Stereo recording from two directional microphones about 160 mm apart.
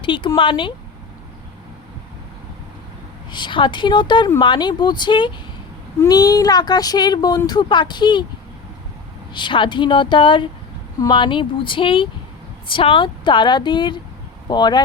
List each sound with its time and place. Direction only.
0.0 s a woman's voice: 30° left (ahead or behind)
3.3 s speech: 30° left (ahead or behind)
9.3 s a woman's voice: 30° left (ahead or behind)